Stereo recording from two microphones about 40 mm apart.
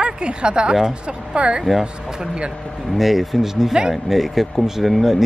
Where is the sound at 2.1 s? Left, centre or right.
Right.